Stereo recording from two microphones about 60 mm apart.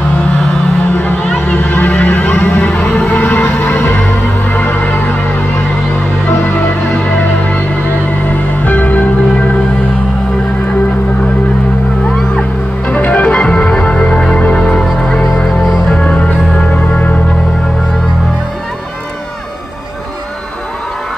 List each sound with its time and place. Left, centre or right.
0.9 s a sound: left
1.5 s music: left
6.2 s music: left
12.8 s music: left